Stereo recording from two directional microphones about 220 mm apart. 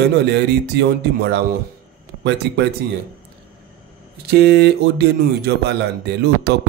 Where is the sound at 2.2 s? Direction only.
50° right (ahead or behind).